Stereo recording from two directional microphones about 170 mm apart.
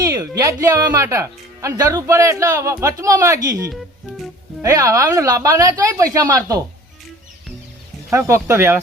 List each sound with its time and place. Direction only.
0.0 s speech: 20° right (ahead or behind)
4.6 s speech: 20° right (ahead or behind)
8.1 s speech: 15° right (ahead or behind)